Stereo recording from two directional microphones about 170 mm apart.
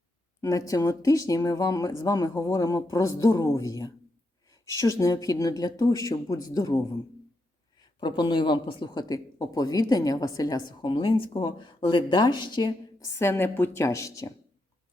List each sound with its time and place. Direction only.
0.4 s speech: 20° left (ahead or behind)